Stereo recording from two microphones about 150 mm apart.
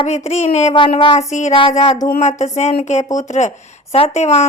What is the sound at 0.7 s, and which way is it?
Speech, 35° left (ahead or behind).